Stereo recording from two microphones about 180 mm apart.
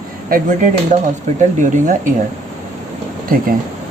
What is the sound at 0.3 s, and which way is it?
Speech, 50° right (ahead or behind).